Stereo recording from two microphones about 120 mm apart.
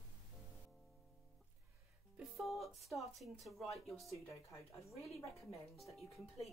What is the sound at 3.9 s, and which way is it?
Speech, centre (ahead or behind).